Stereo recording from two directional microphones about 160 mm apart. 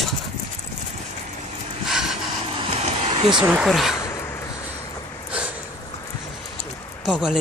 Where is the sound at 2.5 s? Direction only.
35° right (ahead or behind).